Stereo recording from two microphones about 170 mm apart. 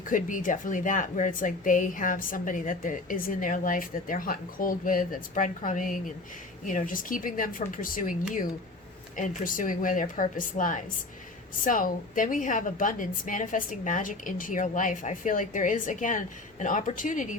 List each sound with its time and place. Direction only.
0.1 s speech: 50° left (ahead or behind)